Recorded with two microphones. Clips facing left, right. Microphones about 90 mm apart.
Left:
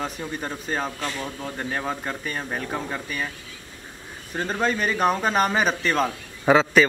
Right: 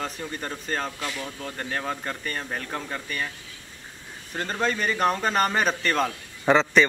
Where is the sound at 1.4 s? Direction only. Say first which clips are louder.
Left 2 dB; 10° left (ahead or behind).